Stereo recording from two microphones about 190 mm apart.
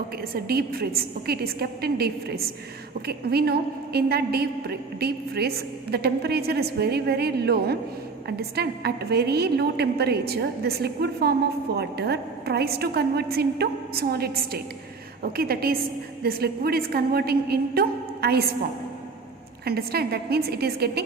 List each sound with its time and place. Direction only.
0.2 s a woman's voice: 55° right (ahead or behind)
19.6 s a woman's voice: 55° right (ahead or behind)